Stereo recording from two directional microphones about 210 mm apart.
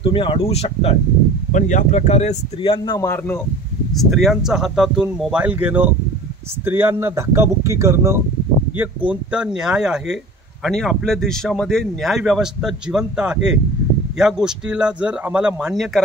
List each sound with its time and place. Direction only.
0.0 s speech: 25° left (ahead or behind)
3.9 s speech: centre (ahead or behind)